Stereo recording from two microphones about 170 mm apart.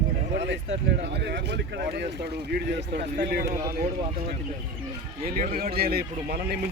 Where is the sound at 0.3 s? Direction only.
90° right.